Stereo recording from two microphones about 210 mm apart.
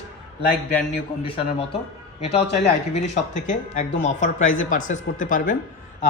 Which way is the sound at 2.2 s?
30° left (ahead or behind).